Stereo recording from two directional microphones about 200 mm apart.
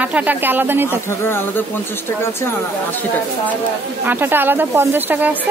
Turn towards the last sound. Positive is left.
turn(degrees=-10)  # may be behind; listen again after turning